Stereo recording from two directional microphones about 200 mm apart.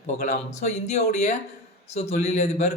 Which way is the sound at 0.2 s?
35° left (ahead or behind).